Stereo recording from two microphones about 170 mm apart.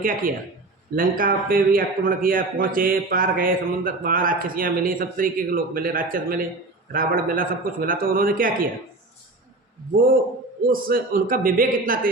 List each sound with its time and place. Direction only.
0.0 s a man's voice: 55° right (ahead or behind)
10.7 s a man's voice: 55° right (ahead or behind)